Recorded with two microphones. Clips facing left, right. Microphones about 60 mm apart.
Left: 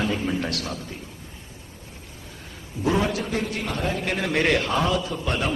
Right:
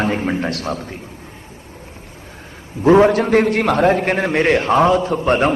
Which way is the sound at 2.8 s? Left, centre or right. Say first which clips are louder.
Right 12 dB; right.